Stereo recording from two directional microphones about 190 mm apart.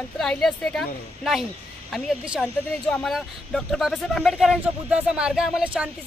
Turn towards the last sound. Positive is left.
turn(degrees=-5)  # may be behind; listen again after turning